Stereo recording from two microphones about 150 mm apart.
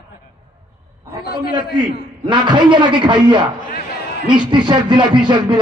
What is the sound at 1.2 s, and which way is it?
Speech, 90° left.